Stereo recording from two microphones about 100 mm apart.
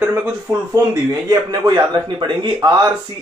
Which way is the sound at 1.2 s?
40° right (ahead or behind).